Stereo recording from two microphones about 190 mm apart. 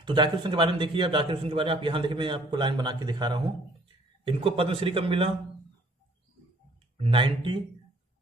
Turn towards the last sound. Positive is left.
turn(degrees=-25)  # may be behind; listen again after turning